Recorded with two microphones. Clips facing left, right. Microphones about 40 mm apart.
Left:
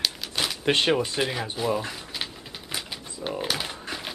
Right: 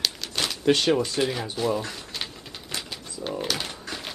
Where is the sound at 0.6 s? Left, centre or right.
Left; by 1.8 s centre.